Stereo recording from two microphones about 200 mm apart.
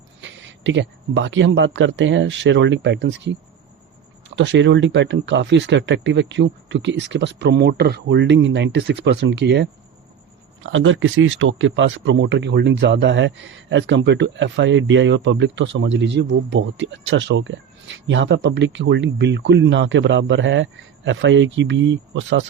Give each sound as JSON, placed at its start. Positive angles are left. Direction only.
{"t": 0.2, "sound": "speech", "side_deg": -65}
{"t": 4.4, "sound": "speech", "side_deg": -65}
{"t": 10.6, "sound": "speech", "side_deg": -75}